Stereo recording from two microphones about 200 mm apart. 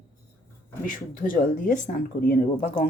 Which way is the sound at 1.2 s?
45° left (ahead or behind).